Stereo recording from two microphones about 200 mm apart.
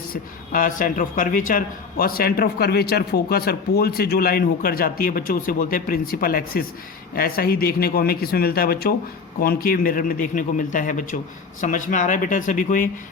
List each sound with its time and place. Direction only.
0.1 s speech: 45° left (ahead or behind)